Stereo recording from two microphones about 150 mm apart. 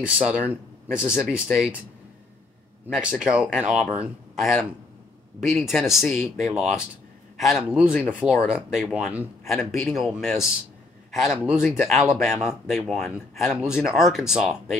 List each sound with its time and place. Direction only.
0.0 s speech: 10° right (ahead or behind)
3.2 s speech: 5° right (ahead or behind)
11.6 s speech: 15° left (ahead or behind)
11.9 s speech: centre (ahead or behind)